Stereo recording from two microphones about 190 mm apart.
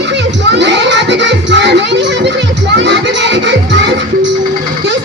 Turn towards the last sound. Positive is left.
turn(degrees=-65)  # may be behind; listen again after turning